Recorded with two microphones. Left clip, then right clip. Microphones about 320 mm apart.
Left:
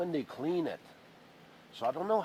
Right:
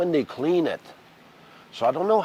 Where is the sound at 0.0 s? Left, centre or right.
Right.